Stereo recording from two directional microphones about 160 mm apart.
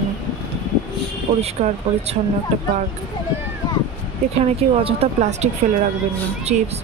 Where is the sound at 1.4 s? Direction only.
40° right (ahead or behind).